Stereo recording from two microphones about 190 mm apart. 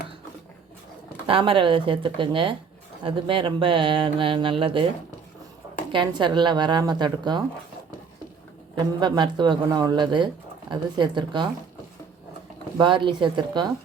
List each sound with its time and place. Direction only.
1.3 s speech: 25° right (ahead or behind)
5.9 s speech: 25° right (ahead or behind)
8.7 s speech: 25° right (ahead or behind)
12.7 s speech: 25° right (ahead or behind)